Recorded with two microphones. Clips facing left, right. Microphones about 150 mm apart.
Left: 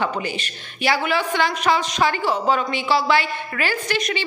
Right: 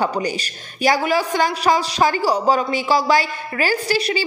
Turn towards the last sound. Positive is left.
turn(degrees=-35)  # may be behind; listen again after turning